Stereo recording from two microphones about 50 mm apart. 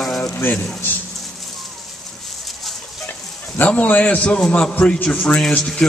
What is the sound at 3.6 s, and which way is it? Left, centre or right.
A man's voice, left.